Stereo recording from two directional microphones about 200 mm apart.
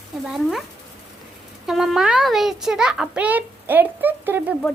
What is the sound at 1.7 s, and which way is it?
A child's voice, centre (ahead or behind).